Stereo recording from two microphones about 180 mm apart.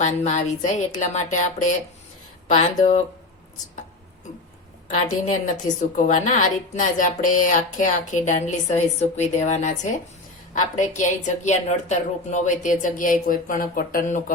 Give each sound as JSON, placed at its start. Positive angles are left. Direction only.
{"t": 0.0, "sound": "a woman's voice", "side_deg": 40}
{"t": 5.2, "sound": "a woman's voice", "side_deg": 45}